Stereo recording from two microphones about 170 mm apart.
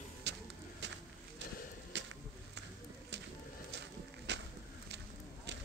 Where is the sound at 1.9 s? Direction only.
90° right.